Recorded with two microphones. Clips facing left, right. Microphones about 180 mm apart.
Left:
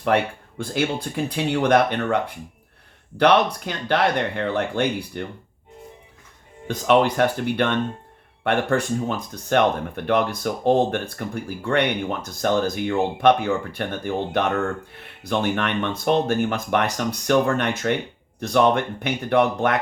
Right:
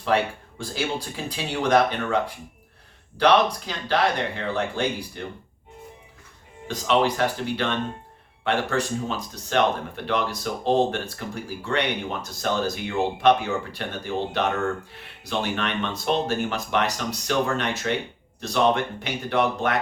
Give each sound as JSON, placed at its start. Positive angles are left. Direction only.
{"t": 0.6, "sound": "speech", "side_deg": 60}
{"t": 6.8, "sound": "speech", "side_deg": 55}